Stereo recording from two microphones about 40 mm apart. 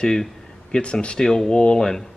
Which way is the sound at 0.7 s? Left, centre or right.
Left.